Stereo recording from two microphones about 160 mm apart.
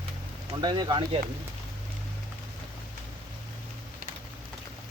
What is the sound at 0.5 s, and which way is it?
Speech, 30° right (ahead or behind).